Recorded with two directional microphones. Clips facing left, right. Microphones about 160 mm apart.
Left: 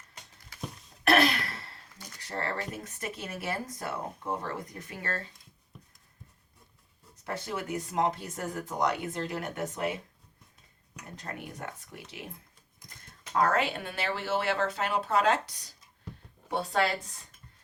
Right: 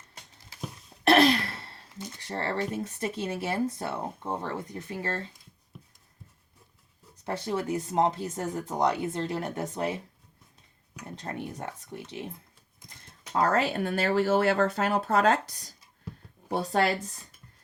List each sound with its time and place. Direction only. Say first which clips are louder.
1.0 s speech: right 4 dB; 30° right (ahead or behind)
7.3 s speech: right 5 dB; 30° right (ahead or behind)
11.1 s speech: right 5 dB; 30° right (ahead or behind)
13.3 s speech: right 2 dB; 35° right (ahead or behind)